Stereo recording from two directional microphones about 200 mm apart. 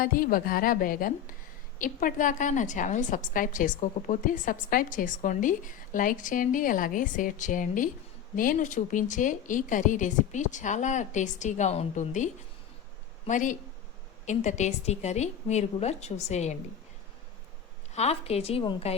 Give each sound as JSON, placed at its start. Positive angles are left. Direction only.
{"t": 0.0, "sound": "a woman's voice", "side_deg": 45}
{"t": 17.9, "sound": "a woman's voice", "side_deg": 30}